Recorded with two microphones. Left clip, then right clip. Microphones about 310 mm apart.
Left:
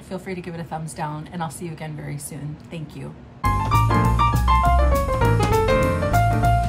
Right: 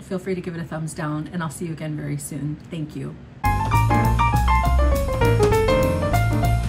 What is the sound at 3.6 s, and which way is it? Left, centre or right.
Music, centre.